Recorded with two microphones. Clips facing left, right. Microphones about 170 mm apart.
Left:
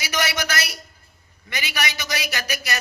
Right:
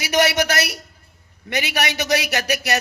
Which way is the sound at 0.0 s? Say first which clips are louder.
Right 8 dB; 65° right (ahead or behind).